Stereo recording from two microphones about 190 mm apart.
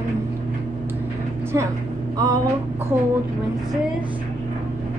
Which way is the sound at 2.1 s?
20° right (ahead or behind).